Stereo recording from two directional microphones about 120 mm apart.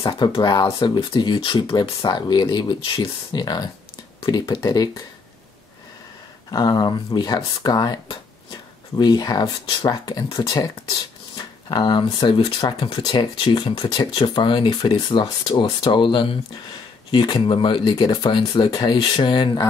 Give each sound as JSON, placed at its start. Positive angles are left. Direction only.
{"t": 0.0, "sound": "speech", "side_deg": 40}
{"t": 6.5, "sound": "speech", "side_deg": 35}